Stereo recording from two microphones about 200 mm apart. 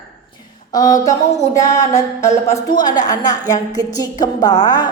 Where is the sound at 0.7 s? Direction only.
20° left (ahead or behind).